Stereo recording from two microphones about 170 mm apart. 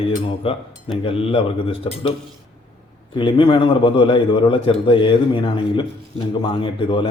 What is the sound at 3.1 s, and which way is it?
A man's voice, 30° left (ahead or behind).